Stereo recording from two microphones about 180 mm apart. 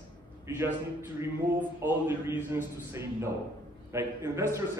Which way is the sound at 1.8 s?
10° right (ahead or behind).